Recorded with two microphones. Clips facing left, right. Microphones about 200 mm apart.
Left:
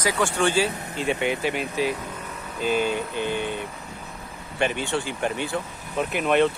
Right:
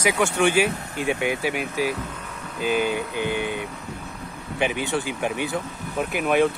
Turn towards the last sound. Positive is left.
turn(degrees=-5)  # may be behind; listen again after turning